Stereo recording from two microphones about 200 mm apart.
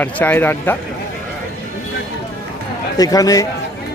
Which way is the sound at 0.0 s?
10° left (ahead or behind).